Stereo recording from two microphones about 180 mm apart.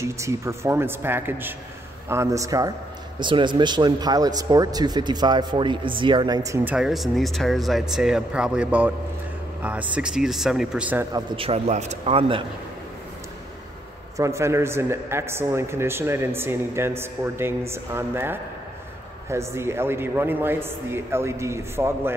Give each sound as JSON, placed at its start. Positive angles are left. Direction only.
{"t": 0.0, "sound": "a man's voice", "side_deg": -15}
{"t": 11.1, "sound": "speech", "side_deg": -30}
{"t": 14.1, "sound": "a man's voice", "side_deg": -15}